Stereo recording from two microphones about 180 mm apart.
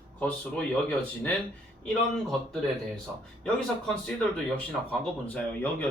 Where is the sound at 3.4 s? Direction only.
5° left (ahead or behind).